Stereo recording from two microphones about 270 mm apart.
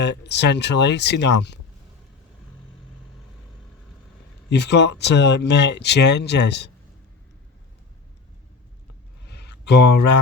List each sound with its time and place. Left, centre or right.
0.0 s speech: left
4.4 s speech: left
9.2 s a sound: left